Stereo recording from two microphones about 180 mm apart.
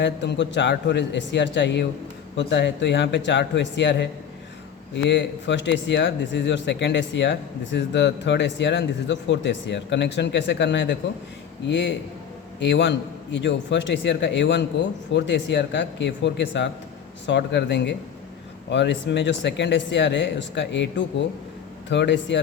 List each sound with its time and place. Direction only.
0.0 s a man's voice: 75° left (ahead or behind)